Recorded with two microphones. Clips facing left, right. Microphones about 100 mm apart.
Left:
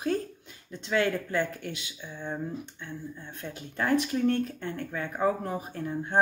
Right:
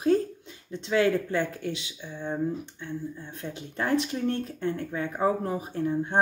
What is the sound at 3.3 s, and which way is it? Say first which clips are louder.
Speech: right 2 dB; 30° right (ahead or behind).